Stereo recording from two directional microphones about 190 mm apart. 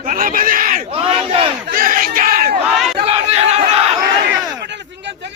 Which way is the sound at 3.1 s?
35° right (ahead or behind).